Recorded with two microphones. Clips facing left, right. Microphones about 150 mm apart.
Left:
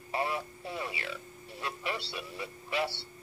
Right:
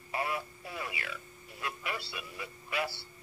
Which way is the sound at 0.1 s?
30° left (ahead or behind).